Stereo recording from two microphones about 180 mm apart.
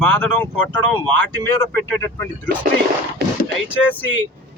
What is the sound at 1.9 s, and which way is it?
Speech, 15° left (ahead or behind).